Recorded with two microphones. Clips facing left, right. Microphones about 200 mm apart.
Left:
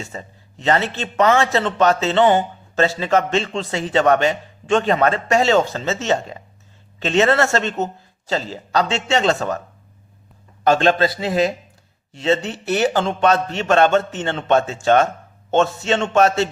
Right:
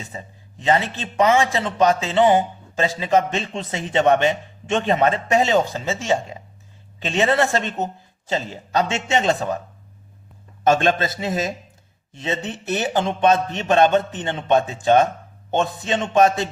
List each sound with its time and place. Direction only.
0.7 s a man's voice: 15° right (ahead or behind)
9.0 s a man's voice: 15° right (ahead or behind)
10.6 s a man's voice: 20° right (ahead or behind)
12.5 s a man's voice: 20° right (ahead or behind)